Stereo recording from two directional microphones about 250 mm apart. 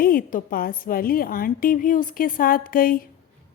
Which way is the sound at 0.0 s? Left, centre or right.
Left.